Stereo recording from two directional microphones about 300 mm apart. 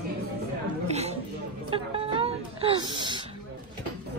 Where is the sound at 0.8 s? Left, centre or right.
Right.